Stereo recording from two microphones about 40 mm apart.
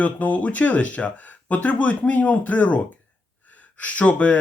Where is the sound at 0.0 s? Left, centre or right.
Left.